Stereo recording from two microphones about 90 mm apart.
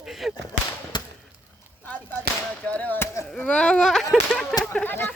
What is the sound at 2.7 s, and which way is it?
Speech, 20° left (ahead or behind).